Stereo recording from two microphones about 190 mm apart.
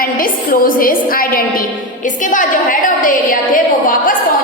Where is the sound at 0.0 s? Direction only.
50° left (ahead or behind).